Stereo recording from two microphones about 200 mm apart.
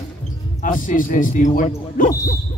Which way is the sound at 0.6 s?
40° left (ahead or behind).